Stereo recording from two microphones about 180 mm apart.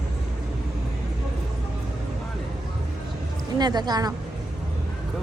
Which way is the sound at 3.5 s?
25° right (ahead or behind).